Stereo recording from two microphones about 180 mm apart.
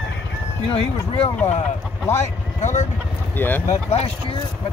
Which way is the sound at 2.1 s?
35° left (ahead or behind).